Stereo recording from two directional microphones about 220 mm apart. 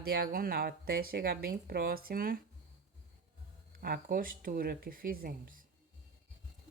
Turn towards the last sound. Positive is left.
turn(degrees=-40)  # may be behind; listen again after turning